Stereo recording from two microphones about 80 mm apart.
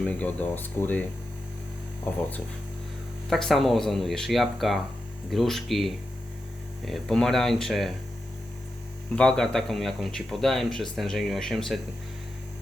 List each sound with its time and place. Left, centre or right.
0.0 s speech: centre
3.2 s speech: centre
9.1 s speech: centre